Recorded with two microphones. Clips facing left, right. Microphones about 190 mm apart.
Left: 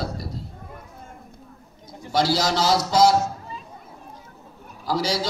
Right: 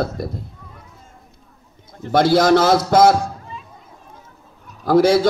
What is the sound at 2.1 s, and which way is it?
A man's voice, 55° right (ahead or behind).